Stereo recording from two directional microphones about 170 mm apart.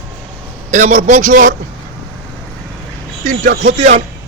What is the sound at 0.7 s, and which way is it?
Speech, 45° right (ahead or behind).